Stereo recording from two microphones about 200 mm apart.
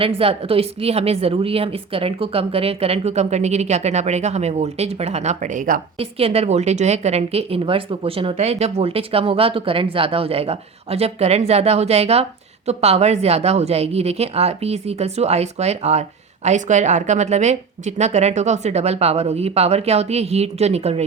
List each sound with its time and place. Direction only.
0.2 s a woman's voice: 30° right (ahead or behind)
6.0 s a woman's voice: 30° right (ahead or behind)